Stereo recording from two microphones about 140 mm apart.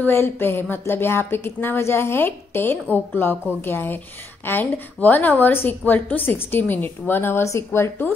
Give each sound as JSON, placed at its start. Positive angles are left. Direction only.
{"t": 0.0, "sound": "a woman's voice", "side_deg": 15}